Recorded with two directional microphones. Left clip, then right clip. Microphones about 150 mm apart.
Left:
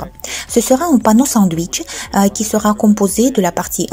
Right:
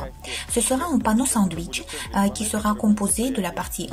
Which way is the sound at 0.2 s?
50° left (ahead or behind).